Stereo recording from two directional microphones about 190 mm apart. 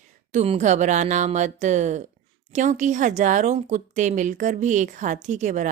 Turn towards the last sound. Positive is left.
turn(degrees=-40)  # may be behind; listen again after turning